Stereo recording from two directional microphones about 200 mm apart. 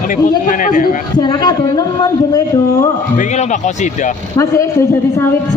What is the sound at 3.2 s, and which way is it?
Speech, 35° left (ahead or behind).